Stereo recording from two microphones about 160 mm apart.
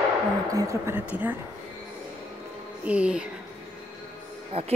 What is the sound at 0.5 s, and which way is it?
Speech, 20° right (ahead or behind).